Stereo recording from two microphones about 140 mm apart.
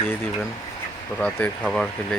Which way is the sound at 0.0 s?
15° left (ahead or behind).